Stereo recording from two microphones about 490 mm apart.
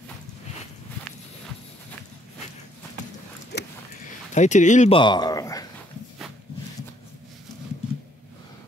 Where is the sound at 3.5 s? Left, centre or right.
Left.